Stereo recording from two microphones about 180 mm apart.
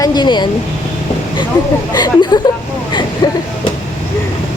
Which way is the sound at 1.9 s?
20° left (ahead or behind).